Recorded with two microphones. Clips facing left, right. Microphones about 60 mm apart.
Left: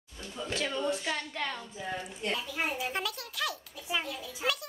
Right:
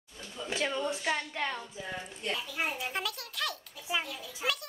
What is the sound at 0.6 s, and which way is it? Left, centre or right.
A woman's voice, centre.